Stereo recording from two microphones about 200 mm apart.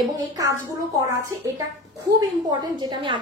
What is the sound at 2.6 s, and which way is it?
Speech, 20° right (ahead or behind).